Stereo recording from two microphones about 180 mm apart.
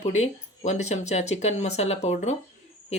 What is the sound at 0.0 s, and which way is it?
Speech, 40° left (ahead or behind).